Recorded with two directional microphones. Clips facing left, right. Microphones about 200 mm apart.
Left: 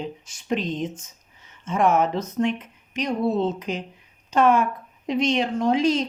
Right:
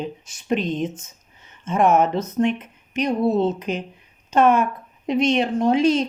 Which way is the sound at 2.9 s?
60° right (ahead or behind).